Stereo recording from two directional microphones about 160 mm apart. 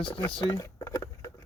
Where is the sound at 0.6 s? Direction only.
15° left (ahead or behind).